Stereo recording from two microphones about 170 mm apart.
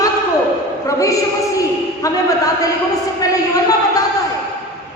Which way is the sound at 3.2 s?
20° left (ahead or behind).